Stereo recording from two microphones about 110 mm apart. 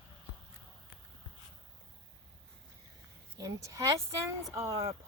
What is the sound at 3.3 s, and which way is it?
Speech, 30° right (ahead or behind).